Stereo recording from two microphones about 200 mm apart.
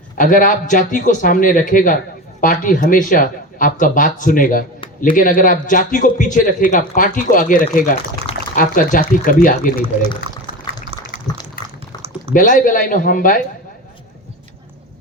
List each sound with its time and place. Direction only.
0.2 s a man's voice: 40° left (ahead or behind)
12.3 s a man's voice: 40° left (ahead or behind)